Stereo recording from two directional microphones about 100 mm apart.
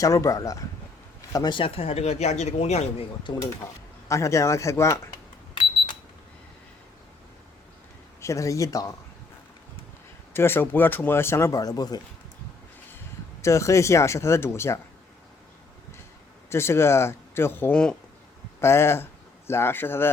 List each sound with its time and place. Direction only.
0.0 s speech: 35° left (ahead or behind)
1.5 s speech: 65° left (ahead or behind); by 3.1 s 90° left
4.1 s speech: 30° left (ahead or behind)
8.2 s speech: 30° left (ahead or behind)
10.3 s speech: 20° left (ahead or behind); by 11.9 s 40° left (ahead or behind)
13.4 s speech: 30° left (ahead or behind)
16.5 s speech: 25° left (ahead or behind)